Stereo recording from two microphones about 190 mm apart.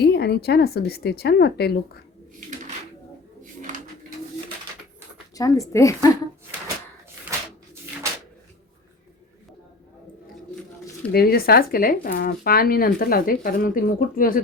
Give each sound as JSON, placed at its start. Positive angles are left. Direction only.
{"t": 0.0, "sound": "a woman's voice", "side_deg": 60}
{"t": 3.4, "sound": "a sound", "side_deg": -40}
{"t": 5.3, "sound": "speech", "side_deg": 20}
{"t": 11.1, "sound": "speech", "side_deg": 55}